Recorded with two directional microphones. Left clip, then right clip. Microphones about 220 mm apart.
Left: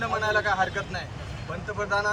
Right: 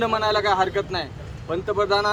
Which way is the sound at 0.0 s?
30° right (ahead or behind).